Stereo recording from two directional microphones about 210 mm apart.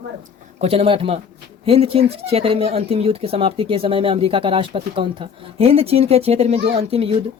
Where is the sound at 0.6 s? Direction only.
30° right (ahead or behind).